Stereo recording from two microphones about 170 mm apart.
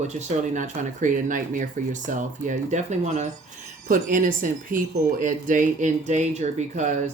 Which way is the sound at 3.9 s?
55° right (ahead or behind).